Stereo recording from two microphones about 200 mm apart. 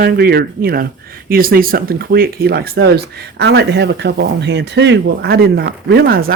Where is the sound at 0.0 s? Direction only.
50° right (ahead or behind).